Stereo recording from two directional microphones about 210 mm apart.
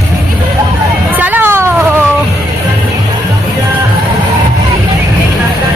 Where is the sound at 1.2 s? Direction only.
10° right (ahead or behind).